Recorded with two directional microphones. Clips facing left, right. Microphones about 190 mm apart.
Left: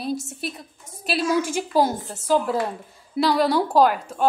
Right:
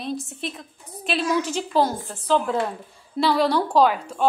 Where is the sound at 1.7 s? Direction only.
10° left (ahead or behind).